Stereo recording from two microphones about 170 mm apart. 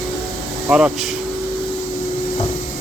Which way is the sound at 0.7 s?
5° right (ahead or behind).